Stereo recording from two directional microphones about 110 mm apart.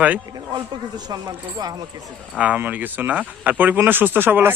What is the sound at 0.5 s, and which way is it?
Speech, 40° right (ahead or behind).